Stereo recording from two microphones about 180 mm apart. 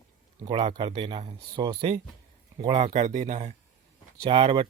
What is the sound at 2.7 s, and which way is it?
Speech, 40° right (ahead or behind).